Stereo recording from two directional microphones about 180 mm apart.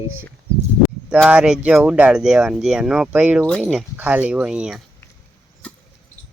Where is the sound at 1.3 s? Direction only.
5° right (ahead or behind).